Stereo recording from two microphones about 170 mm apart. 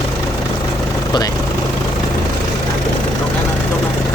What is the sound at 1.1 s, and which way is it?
Speech, 25° left (ahead or behind).